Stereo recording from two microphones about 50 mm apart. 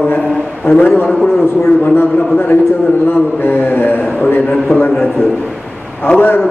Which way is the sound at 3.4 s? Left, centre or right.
Left.